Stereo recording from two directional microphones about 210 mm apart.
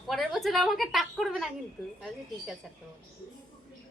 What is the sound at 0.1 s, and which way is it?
A woman's voice, centre (ahead or behind).